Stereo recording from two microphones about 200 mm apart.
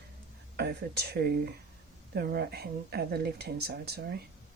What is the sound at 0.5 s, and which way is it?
Speech, 55° right (ahead or behind).